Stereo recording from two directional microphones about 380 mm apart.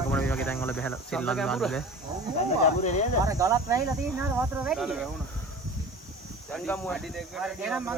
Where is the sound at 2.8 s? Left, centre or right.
Centre.